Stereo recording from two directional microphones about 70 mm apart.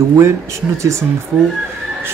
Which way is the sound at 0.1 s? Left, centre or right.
Right.